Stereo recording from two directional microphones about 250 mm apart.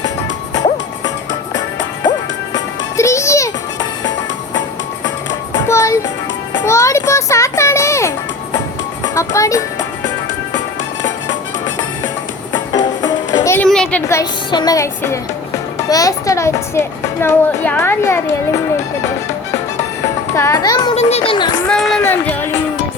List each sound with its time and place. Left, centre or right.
3.0 s music: centre
5.3 s music: centre
9.1 s music: centre
12.7 s music: centre
15.9 s a child's voice: centre
20.3 s speech: centre
21.7 s a sound: centre